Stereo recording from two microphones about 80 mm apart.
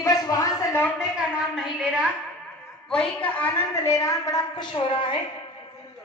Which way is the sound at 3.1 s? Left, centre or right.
Centre.